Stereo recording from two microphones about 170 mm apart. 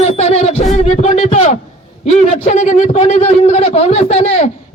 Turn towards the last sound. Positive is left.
turn(degrees=40)  # may be behind; listen again after turning